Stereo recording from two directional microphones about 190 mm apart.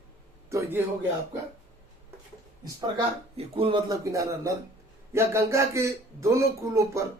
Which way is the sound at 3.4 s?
25° right (ahead or behind).